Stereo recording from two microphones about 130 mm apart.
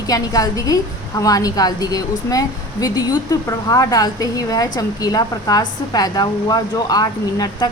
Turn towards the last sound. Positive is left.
turn(degrees=30)  # may be behind; listen again after turning